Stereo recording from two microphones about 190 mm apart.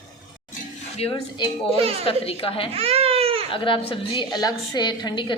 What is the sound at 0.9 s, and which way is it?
Speech, 30° left (ahead or behind).